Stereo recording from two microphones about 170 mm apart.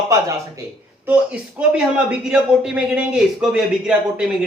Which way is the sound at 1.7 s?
5° right (ahead or behind).